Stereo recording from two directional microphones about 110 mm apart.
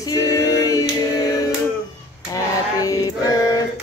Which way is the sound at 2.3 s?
35° left (ahead or behind).